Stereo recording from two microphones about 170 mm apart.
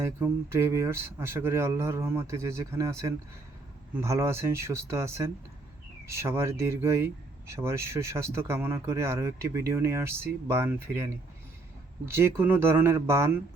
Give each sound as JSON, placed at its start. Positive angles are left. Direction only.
{"t": 0.0, "sound": "speech", "side_deg": -15}
{"t": 12.1, "sound": "speech", "side_deg": -15}